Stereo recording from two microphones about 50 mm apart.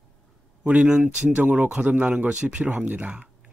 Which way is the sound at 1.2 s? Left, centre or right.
Right.